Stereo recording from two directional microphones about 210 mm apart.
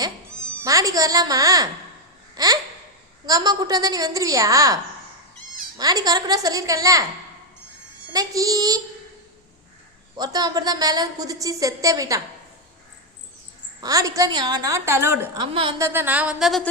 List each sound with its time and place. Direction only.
0.6 s a woman's voice: 15° right (ahead or behind)
2.3 s babbling: 15° right (ahead or behind)
3.2 s a woman's voice: 15° right (ahead or behind)
8.1 s a woman's voice: 15° right (ahead or behind)
10.2 s a woman's voice: 20° right (ahead or behind)
13.8 s a woman's voice: 15° right (ahead or behind)
15.5 s a woman's voice: 25° right (ahead or behind)
15.9 s a woman's voice: 10° right (ahead or behind)